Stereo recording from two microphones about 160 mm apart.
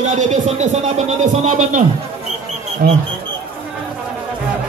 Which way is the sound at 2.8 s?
70° right (ahead or behind).